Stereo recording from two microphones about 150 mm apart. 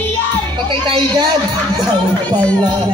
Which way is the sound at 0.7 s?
30° right (ahead or behind).